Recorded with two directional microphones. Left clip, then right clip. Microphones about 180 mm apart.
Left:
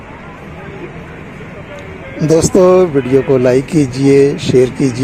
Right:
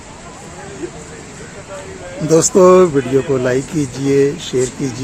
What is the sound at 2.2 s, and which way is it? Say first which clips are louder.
Speech: left 1 dB; 30° left (ahead or behind).